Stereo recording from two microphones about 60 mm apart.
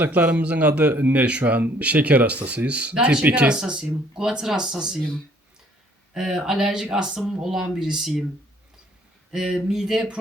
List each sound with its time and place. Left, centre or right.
0.0 s speech: right; by 5.0 s centre
6.1 s speech: centre
9.3 s speech: centre